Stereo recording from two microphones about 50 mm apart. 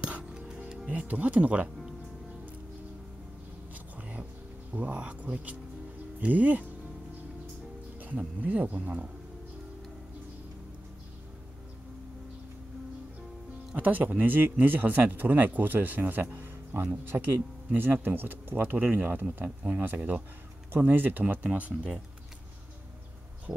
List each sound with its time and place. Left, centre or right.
0.3 s music: centre
0.8 s speech: right
3.7 s a sound: right
4.7 s speech: right
8.4 s speech: right
13.7 s speech: right